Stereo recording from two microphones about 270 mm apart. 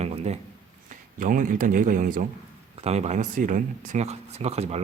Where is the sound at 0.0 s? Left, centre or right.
Right.